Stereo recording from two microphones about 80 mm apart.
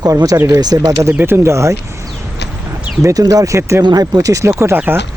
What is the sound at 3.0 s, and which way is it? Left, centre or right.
Speech, right.